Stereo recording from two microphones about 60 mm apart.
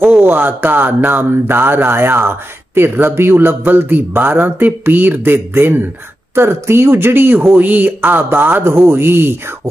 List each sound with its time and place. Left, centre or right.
0.2 s speech: right